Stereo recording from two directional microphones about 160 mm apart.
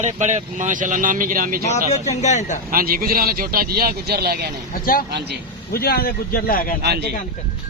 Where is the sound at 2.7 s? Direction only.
65° right (ahead or behind).